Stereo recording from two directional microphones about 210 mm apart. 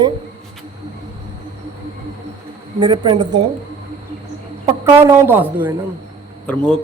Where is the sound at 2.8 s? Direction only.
20° right (ahead or behind).